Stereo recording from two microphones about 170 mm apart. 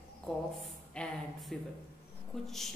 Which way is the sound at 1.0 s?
5° left (ahead or behind).